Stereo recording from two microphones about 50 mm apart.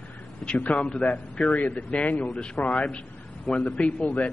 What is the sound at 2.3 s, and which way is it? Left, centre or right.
Speech, centre.